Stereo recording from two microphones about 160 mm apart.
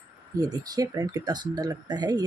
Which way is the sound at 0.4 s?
25° right (ahead or behind).